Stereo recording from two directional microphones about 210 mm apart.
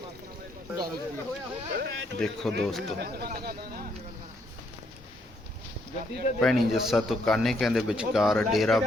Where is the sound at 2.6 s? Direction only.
Centre (ahead or behind).